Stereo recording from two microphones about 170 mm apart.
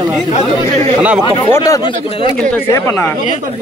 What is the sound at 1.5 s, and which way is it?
Speech, 20° left (ahead or behind).